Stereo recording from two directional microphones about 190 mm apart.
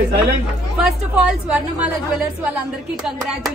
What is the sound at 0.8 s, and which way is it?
Speech, 5° right (ahead or behind).